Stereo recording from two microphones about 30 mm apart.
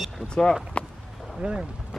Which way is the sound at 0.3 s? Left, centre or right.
Left.